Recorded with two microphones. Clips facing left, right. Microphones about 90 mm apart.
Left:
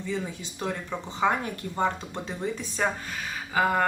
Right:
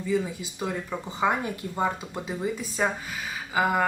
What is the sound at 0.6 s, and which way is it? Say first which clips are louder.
Speech: right 1 dB; 5° right (ahead or behind).